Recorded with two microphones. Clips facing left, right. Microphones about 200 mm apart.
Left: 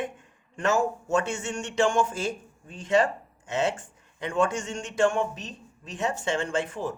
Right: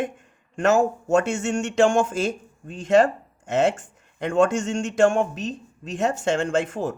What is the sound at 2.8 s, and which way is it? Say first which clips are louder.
Speech: right 6 dB; 45° right (ahead or behind).